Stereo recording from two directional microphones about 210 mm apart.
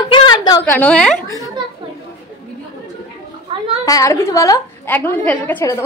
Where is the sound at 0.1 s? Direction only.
20° left (ahead or behind).